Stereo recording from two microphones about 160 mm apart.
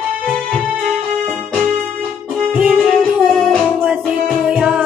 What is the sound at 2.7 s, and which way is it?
Music, 5° left (ahead or behind).